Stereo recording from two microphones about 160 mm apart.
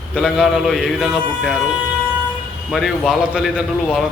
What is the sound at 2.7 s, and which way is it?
A man's voice, centre (ahead or behind).